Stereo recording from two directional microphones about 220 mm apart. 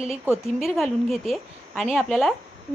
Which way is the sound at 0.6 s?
Centre (ahead or behind).